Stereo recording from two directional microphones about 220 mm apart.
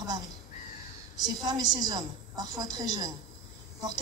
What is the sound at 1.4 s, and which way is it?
A woman's voice, 20° right (ahead or behind).